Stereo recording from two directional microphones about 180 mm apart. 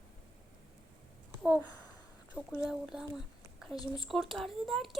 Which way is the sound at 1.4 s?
10° right (ahead or behind).